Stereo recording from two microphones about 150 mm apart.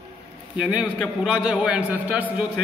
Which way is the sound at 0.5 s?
5° right (ahead or behind).